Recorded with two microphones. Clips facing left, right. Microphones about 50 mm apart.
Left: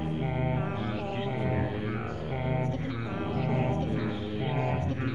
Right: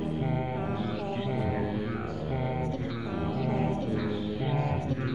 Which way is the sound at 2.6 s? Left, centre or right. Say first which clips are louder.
Even; left.